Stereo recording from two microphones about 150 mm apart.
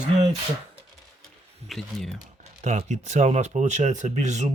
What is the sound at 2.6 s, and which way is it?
Speech, 50° right (ahead or behind).